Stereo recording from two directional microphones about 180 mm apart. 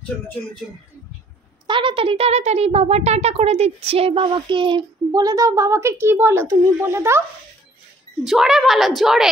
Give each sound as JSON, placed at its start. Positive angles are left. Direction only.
{"t": 1.7, "sound": "speech", "side_deg": -30}
{"t": 8.3, "sound": "a woman's voice", "side_deg": 0}